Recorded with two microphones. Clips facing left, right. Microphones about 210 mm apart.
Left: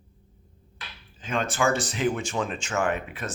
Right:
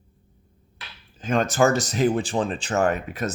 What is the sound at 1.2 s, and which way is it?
Speech, 40° right (ahead or behind).